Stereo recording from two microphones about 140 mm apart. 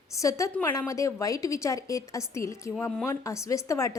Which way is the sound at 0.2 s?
25° left (ahead or behind).